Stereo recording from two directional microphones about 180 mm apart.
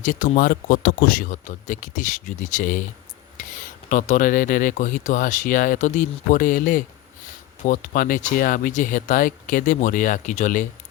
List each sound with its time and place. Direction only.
0.0 s speech: 45° left (ahead or behind)
3.4 s a sound: 45° left (ahead or behind)
3.8 s speech: 45° left (ahead or behind)